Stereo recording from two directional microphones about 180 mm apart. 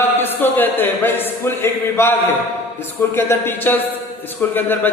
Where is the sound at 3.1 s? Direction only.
15° left (ahead or behind).